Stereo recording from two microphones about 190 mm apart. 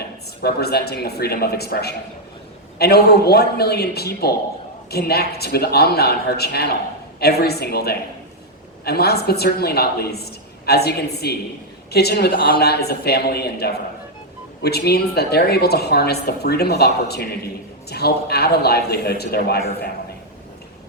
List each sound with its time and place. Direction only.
0.4 s a woman's voice: 55° left (ahead or behind)